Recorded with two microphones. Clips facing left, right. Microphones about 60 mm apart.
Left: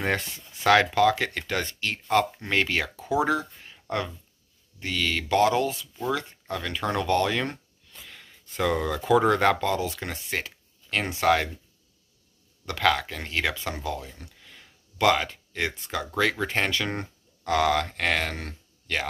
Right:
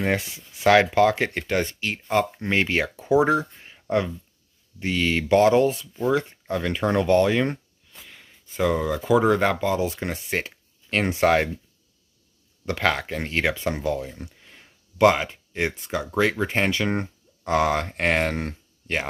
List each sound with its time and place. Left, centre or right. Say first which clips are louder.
0.9 s speech: right 2 dB; right
4.7 s speech: right 4 dB; right
7.9 s speech: even; centre
9.8 s speech: right 4 dB; right
12.6 s speech: even; right